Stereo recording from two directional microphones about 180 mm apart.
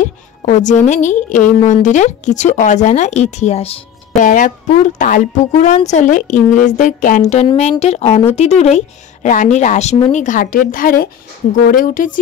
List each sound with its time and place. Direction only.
0.0 s a woman's voice: 45° left (ahead or behind)